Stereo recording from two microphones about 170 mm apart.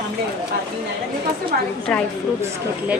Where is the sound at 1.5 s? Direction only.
55° right (ahead or behind).